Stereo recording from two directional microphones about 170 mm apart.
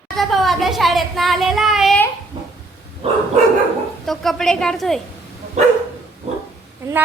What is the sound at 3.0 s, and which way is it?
Dog, 35° right (ahead or behind).